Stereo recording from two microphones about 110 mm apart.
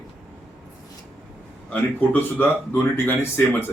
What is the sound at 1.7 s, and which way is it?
Speech, 15° left (ahead or behind).